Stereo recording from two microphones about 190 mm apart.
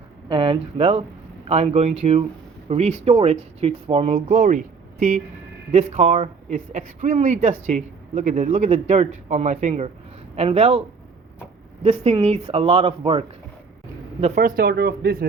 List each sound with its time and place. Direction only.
0.3 s speech: 25° right (ahead or behind)
14.4 s speech: 50° right (ahead or behind)